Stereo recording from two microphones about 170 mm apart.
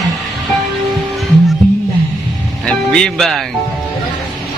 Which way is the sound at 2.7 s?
5° left (ahead or behind).